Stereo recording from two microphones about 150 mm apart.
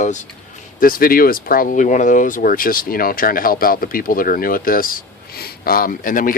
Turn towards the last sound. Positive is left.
turn(degrees=65)  # may be behind; listen again after turning